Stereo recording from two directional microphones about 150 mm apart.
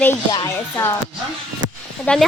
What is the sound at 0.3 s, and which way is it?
Speech, 30° left (ahead or behind).